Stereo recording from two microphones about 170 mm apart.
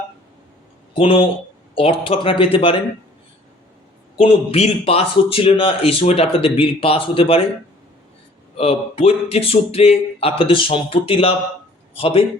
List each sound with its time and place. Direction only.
0.9 s speech: 35° left (ahead or behind)
4.2 s speech: 35° left (ahead or behind)
8.5 s speech: 35° left (ahead or behind)